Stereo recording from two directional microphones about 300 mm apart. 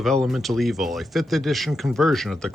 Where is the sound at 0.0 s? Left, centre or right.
Centre.